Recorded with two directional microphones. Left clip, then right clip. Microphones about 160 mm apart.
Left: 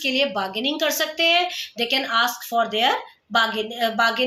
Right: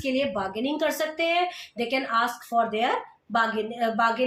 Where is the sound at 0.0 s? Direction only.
5° left (ahead or behind).